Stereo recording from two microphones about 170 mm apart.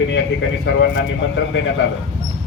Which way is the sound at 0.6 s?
90° left.